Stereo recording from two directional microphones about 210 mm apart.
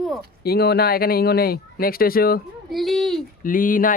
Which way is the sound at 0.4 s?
50° left (ahead or behind).